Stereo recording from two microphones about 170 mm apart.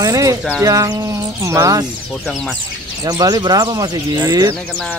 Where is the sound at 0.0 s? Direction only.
20° right (ahead or behind).